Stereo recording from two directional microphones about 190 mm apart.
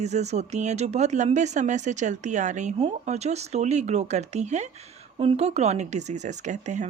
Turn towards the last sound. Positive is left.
turn(degrees=-40)  # may be behind; listen again after turning